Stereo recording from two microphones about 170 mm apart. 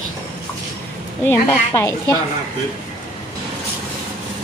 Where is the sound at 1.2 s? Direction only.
15° left (ahead or behind).